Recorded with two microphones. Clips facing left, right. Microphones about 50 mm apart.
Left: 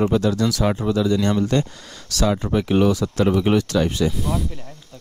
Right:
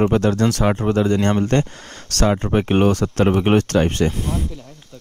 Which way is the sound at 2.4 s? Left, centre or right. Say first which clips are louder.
Even; right.